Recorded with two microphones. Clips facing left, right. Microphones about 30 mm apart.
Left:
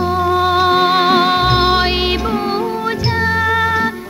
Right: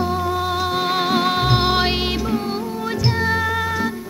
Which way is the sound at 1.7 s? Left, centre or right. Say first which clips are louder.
Left 4 dB; centre.